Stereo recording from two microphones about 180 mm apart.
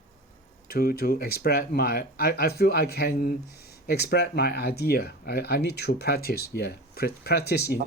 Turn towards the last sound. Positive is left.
turn(degrees=60)  # may be behind; listen again after turning